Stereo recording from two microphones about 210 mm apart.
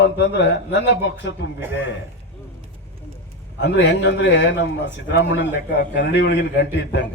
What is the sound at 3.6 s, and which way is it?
A man's voice, 55° left (ahead or behind).